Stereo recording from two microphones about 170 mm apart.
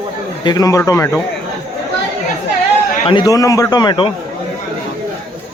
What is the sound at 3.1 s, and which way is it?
A man's voice, 25° left (ahead or behind).